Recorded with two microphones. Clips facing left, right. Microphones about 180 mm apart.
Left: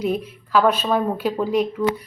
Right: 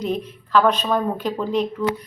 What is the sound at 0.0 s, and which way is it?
Speech, 10° left (ahead or behind).